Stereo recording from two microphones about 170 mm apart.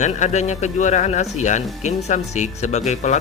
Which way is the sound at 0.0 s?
45° left (ahead or behind).